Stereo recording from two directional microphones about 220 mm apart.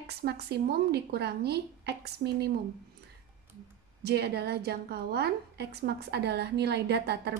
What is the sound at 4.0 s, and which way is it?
A woman's voice, 50° right (ahead or behind).